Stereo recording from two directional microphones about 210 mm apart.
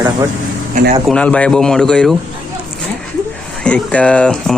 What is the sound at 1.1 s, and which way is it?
Speech, 5° left (ahead or behind).